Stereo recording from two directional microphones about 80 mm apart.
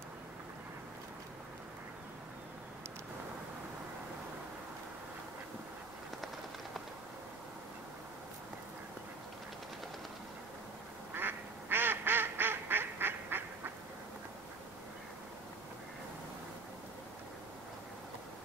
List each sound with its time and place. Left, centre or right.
11.1 s duck: right